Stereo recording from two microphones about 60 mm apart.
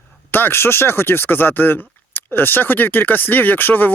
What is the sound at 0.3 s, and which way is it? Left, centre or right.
Speech, left.